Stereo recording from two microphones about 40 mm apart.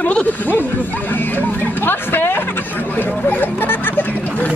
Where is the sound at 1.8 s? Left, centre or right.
Left.